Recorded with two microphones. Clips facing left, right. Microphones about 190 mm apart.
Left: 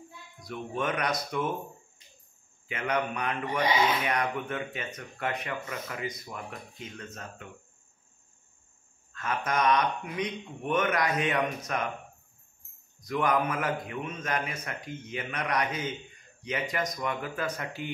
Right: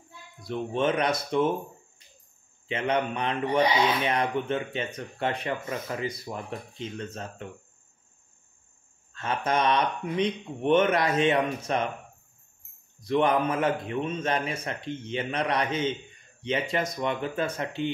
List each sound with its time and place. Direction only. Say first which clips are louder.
0.4 s speech: right 6 dB; 25° right (ahead or behind)
2.7 s speech: right 3 dB; 25° right (ahead or behind)
9.1 s speech: right 3 dB; 30° right (ahead or behind)
13.0 s speech: right 4 dB; 30° right (ahead or behind)